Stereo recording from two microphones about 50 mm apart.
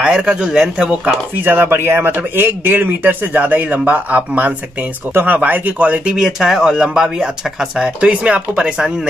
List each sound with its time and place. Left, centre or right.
0.0 s speech: centre
1.4 s speech: right
6.1 s speech: centre
7.8 s speech: right